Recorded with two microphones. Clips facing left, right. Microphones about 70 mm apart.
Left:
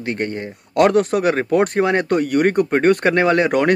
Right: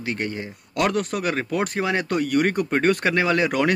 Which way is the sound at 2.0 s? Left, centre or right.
Left.